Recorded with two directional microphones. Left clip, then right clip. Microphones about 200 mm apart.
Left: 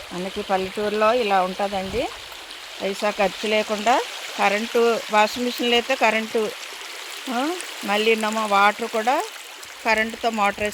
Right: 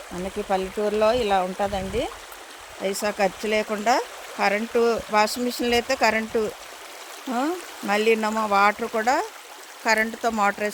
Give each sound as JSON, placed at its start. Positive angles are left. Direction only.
{"t": 0.4, "sound": "speech", "side_deg": 30}